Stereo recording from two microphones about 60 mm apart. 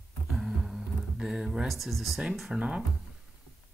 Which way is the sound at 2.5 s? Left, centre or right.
Centre.